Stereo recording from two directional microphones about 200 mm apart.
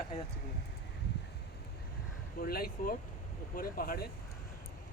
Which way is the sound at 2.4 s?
50° left (ahead or behind).